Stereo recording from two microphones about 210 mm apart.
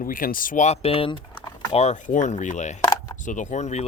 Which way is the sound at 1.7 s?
35° left (ahead or behind).